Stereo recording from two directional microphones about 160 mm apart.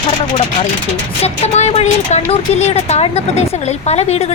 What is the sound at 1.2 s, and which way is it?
A woman's voice, 40° left (ahead or behind).